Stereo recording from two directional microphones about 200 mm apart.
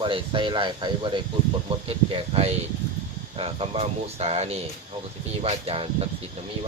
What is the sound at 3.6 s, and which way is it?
Speech, 30° right (ahead or behind).